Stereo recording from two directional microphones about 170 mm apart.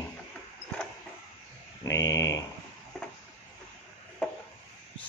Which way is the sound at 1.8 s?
20° left (ahead or behind).